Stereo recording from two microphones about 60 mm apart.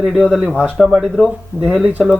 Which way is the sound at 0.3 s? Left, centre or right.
Centre.